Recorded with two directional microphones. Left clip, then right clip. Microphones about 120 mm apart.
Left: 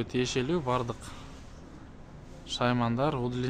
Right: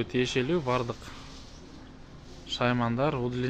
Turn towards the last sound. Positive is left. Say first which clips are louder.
# right 1 dB
turn(degrees=0)  # may be behind; listen again after turning